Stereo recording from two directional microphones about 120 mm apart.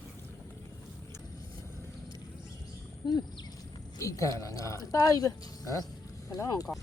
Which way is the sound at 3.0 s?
35° left (ahead or behind).